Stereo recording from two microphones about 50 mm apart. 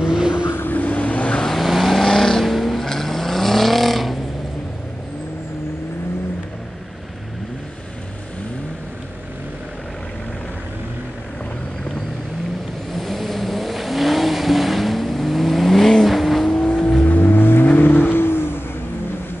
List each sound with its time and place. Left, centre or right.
0.0 s vehicle: centre
0.6 s vehicle: left
1.4 s vehicle: centre
12.9 s vehicle: centre
16.4 s vehicle: centre
17.0 s music: left
17.7 s vehicle: left